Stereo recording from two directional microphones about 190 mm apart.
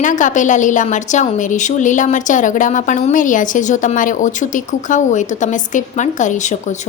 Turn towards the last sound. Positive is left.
turn(degrees=40)  # may be behind; listen again after turning